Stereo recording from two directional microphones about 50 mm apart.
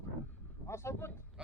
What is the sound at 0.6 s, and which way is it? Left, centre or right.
Speech, left.